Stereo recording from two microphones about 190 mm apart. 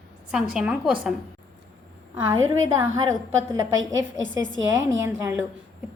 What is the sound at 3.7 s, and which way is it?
Speech, 90° right.